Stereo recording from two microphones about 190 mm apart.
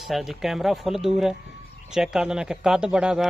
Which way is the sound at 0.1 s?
Centre (ahead or behind).